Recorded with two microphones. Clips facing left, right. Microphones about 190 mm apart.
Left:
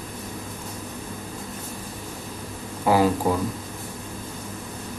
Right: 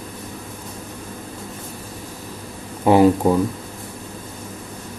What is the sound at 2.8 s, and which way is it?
Speech, 25° right (ahead or behind).